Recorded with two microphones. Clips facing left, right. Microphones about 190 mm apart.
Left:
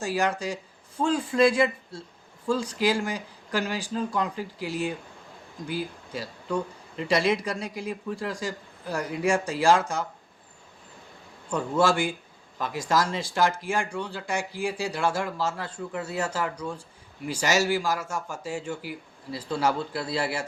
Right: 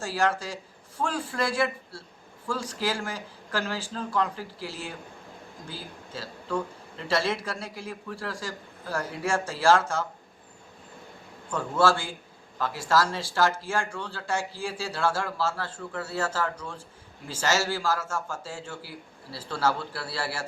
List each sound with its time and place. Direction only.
0.0 s speech: 15° left (ahead or behind)
11.5 s speech: 15° left (ahead or behind)